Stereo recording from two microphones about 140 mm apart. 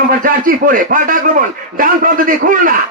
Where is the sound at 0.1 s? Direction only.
85° right.